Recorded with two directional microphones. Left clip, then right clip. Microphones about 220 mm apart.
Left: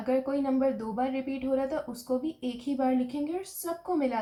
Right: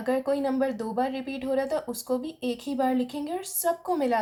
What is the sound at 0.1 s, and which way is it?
Speech, 35° right (ahead or behind).